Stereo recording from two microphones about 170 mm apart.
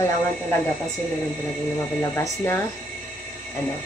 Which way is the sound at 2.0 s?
15° left (ahead or behind).